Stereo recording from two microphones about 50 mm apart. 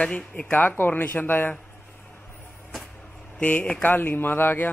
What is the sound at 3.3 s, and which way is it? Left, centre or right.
Speech, left.